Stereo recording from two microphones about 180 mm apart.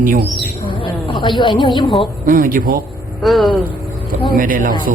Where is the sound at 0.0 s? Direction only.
50° right (ahead or behind).